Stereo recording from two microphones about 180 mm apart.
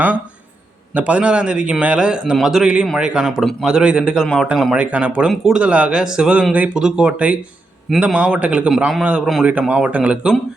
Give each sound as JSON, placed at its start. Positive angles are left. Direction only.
{"t": 0.9, "sound": "a man's voice", "side_deg": -5}